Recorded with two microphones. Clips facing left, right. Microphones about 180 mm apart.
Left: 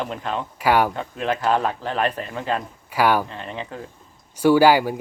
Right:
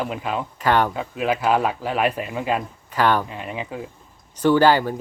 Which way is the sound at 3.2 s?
10° right (ahead or behind).